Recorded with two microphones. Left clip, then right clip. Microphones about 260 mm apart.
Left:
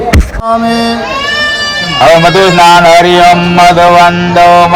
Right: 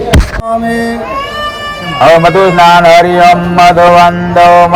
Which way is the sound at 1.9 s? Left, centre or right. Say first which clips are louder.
Even; left.